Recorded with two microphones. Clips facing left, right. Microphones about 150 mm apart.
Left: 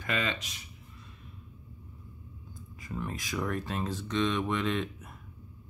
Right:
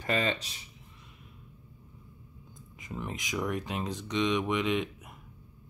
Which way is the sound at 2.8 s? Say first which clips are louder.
Left 1 dB; 20° right (ahead or behind).